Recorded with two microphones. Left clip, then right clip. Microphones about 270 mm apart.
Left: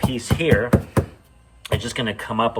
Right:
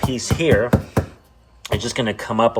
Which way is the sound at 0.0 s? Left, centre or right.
Centre.